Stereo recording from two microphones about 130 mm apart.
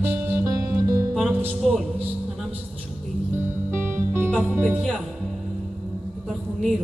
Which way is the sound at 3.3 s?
20° right (ahead or behind).